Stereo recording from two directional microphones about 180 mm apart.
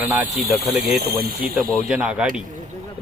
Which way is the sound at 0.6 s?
Centre (ahead or behind).